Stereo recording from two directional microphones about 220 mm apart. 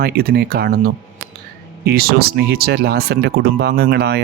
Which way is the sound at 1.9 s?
45° right (ahead or behind).